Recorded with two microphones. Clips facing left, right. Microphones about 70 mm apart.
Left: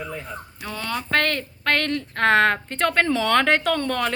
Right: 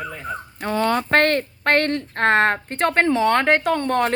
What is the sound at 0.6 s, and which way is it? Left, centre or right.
Speech, right.